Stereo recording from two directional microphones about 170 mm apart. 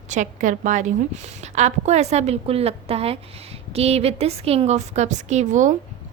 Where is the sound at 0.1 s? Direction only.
45° right (ahead or behind).